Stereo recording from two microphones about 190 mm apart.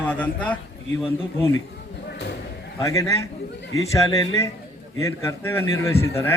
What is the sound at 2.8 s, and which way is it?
A man's voice, 15° left (ahead or behind).